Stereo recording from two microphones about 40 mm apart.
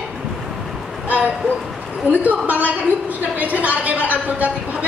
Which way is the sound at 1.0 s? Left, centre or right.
Right.